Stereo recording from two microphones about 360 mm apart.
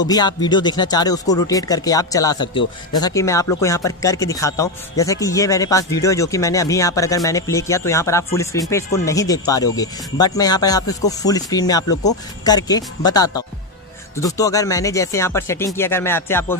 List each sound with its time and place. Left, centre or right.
0.0 s speech: centre